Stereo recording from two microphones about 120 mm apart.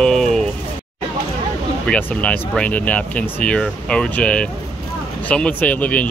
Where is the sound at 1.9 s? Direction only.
10° left (ahead or behind).